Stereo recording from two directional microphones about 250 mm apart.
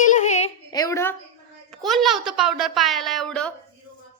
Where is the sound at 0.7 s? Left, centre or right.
Centre.